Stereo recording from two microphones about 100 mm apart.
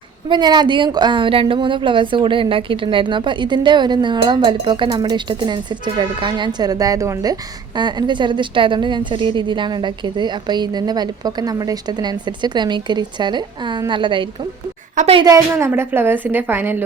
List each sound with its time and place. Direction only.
0.3 s a woman's voice: 45° right (ahead or behind)
7.8 s a woman's voice: 50° right (ahead or behind)
15.5 s a woman's voice: 25° right (ahead or behind)